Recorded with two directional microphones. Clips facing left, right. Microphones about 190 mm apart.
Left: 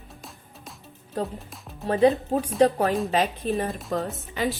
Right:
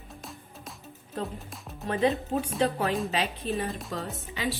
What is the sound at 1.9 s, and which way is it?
A woman's voice, 35° left (ahead or behind).